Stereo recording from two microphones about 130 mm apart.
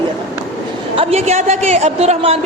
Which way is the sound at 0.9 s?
55° right (ahead or behind).